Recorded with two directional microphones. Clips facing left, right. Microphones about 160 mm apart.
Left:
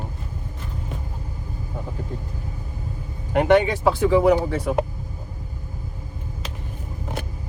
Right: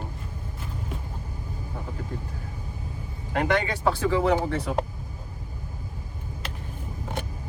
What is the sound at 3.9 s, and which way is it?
Speech, 15° left (ahead or behind).